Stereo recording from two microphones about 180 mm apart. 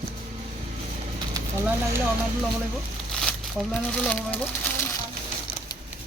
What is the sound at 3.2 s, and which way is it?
Speech, 5° left (ahead or behind).